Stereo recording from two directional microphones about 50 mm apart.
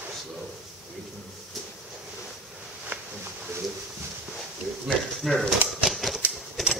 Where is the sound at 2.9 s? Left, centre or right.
Right.